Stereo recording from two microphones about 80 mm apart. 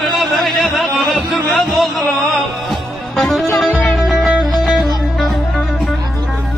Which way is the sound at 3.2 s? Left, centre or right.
Centre.